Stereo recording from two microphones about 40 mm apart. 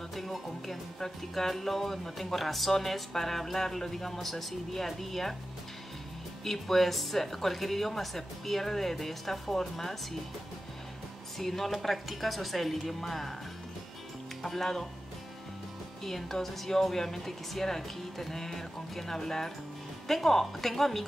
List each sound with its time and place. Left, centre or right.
0.1 s speech: centre
6.4 s speech: centre
11.3 s speech: centre
14.4 s speech: centre
16.0 s speech: centre